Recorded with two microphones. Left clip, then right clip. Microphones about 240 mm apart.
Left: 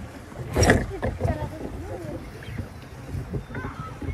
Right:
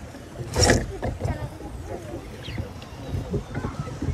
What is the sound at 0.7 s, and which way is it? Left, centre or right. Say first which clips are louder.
Boat: left 1 dB; left.